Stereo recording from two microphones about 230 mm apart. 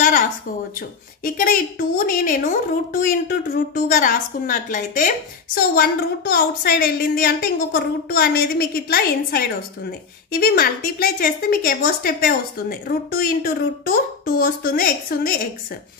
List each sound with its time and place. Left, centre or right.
0.7 s a woman's voice: left